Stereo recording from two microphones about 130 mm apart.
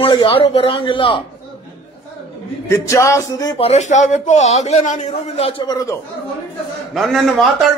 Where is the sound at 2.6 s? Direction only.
25° left (ahead or behind).